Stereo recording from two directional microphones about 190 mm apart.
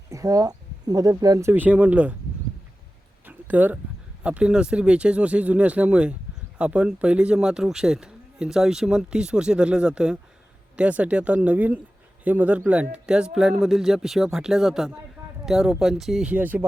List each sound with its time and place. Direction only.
0.1 s speech: 15° right (ahead or behind)
3.2 s a sound: 10° right (ahead or behind)
4.2 s a man's voice: 5° right (ahead or behind)